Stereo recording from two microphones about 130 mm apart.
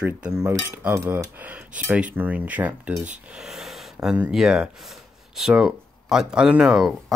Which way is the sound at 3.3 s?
Centre (ahead or behind).